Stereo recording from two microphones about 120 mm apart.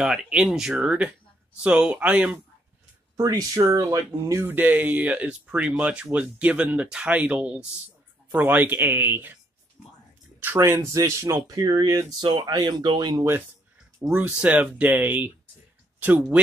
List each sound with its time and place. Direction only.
0.0 s speech: 5° right (ahead or behind)
3.2 s speech: 30° right (ahead or behind)
10.4 s speech: 20° right (ahead or behind); by 13.2 s 40° right (ahead or behind)
13.9 s speech: 15° right (ahead or behind)